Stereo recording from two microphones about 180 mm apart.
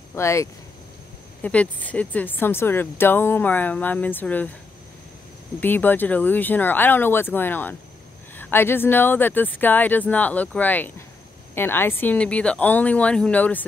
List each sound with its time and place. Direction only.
0.1 s speech: 15° left (ahead or behind)
5.6 s speech: 10° left (ahead or behind)